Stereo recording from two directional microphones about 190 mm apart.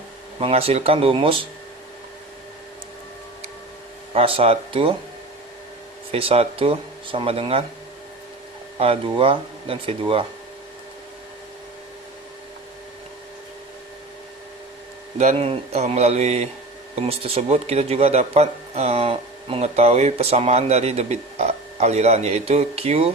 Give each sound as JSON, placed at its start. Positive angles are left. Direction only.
{"t": 0.3, "sound": "speech", "side_deg": -30}
{"t": 4.1, "sound": "speech", "side_deg": -30}
{"t": 6.1, "sound": "speech", "side_deg": -30}
{"t": 8.8, "sound": "speech", "side_deg": -30}
{"t": 15.2, "sound": "speech", "side_deg": -35}